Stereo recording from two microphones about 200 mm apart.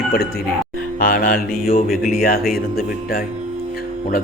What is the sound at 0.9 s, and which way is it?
A man's voice, 45° left (ahead or behind).